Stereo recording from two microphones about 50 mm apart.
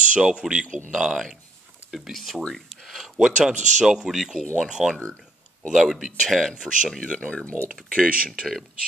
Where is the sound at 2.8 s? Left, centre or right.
Centre.